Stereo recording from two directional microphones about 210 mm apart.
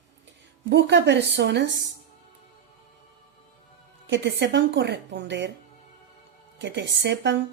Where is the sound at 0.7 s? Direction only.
55° right (ahead or behind).